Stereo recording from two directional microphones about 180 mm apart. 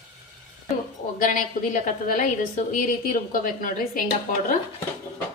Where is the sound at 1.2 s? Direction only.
45° left (ahead or behind).